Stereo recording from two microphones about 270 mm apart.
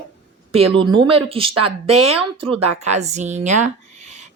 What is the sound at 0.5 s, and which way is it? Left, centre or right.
Speech, centre.